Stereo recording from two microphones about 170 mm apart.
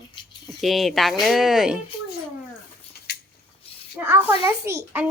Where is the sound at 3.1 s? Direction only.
65° left (ahead or behind).